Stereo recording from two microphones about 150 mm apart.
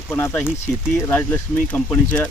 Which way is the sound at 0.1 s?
15° left (ahead or behind).